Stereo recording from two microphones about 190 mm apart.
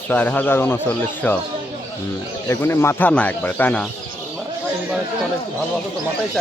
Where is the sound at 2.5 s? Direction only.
15° left (ahead or behind).